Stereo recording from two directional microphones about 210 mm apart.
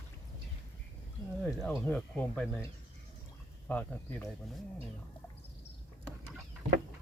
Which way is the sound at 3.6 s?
5° left (ahead or behind).